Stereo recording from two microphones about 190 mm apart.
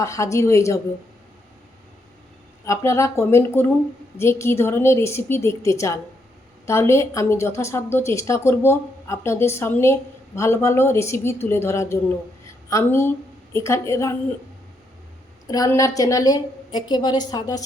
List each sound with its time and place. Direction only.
0.0 s a woman's voice: 15° left (ahead or behind)
2.6 s a woman's voice: 15° left (ahead or behind)
15.4 s a woman's voice: 20° left (ahead or behind)